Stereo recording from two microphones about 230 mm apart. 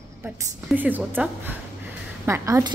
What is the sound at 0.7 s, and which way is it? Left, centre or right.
A woman's voice, centre.